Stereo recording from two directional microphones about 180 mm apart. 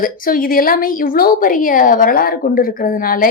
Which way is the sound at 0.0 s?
55° left (ahead or behind).